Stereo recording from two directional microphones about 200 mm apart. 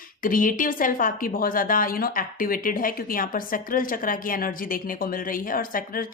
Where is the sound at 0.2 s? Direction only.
45° left (ahead or behind).